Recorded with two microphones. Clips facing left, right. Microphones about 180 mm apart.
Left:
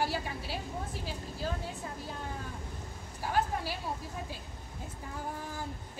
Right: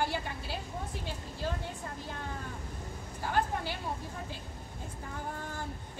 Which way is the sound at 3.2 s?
5° left (ahead or behind).